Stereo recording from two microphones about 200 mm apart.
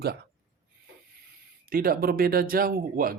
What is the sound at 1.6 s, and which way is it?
Speech, 45° right (ahead or behind).